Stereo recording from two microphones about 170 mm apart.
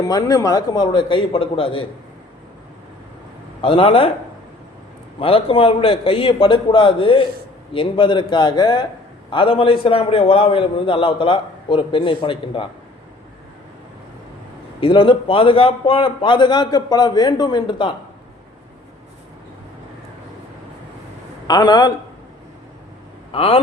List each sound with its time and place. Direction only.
0.0 s a man's voice: 20° left (ahead or behind)
3.6 s a man's voice: 30° left (ahead or behind)
5.2 s a man's voice: 35° left (ahead or behind)
14.8 s a man's voice: 30° left (ahead or behind)
21.4 s a man's voice: 25° left (ahead or behind)
23.3 s a man's voice: 35° left (ahead or behind)